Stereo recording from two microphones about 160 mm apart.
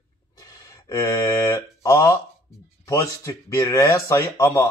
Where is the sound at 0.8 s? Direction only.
20° left (ahead or behind).